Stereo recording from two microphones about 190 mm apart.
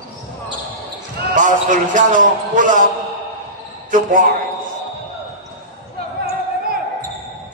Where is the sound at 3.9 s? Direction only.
45° right (ahead or behind).